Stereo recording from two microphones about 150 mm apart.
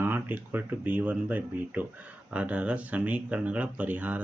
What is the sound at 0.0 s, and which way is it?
Speech, 15° right (ahead or behind).